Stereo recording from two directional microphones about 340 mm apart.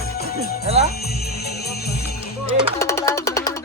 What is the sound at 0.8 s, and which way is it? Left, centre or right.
Music, left.